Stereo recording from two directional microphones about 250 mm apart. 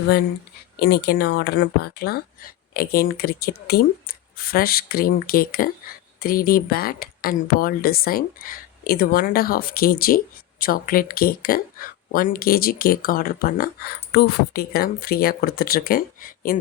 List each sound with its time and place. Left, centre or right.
0.8 s speech: left